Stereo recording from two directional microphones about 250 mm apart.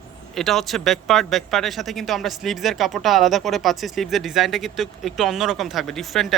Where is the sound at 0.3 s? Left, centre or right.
Centre.